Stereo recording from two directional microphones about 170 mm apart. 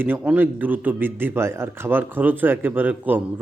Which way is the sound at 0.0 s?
10° right (ahead or behind).